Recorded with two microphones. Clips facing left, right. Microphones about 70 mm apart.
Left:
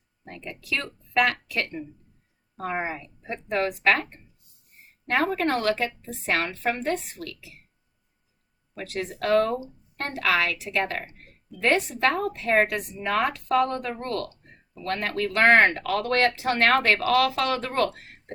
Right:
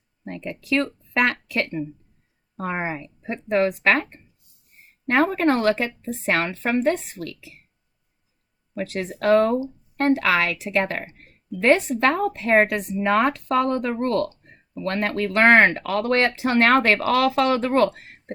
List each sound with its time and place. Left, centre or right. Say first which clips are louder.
0.3 s speech: right 7 dB; right
5.0 s speech: right 5 dB; right
8.7 s speech: right 4 dB; right